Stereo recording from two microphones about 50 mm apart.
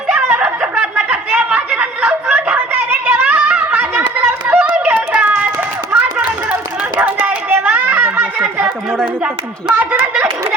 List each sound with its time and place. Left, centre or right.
0.3 s snicker: right
1.1 s chatter: right
1.5 s snicker: right
2.7 s a sound: right
5.9 s chatter: right
7.0 s a sound: right
7.5 s children playing: right
9.7 s speech: right